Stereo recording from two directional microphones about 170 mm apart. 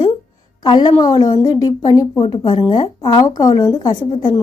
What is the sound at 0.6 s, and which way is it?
A woman's voice, 25° left (ahead or behind).